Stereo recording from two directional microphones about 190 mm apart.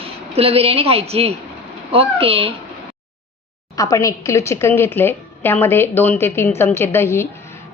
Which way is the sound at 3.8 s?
15° left (ahead or behind).